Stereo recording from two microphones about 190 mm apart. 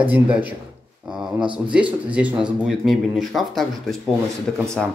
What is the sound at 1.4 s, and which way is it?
Speech, 25° right (ahead or behind).